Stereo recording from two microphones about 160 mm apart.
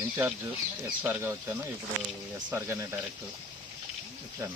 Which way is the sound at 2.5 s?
15° right (ahead or behind).